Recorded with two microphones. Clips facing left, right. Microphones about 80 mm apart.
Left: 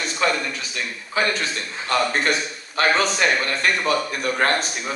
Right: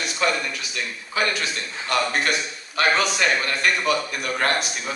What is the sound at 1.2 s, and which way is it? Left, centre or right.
A man's voice, left.